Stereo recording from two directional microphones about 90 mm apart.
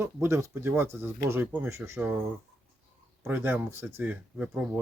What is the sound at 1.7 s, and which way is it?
Speech, 30° right (ahead or behind).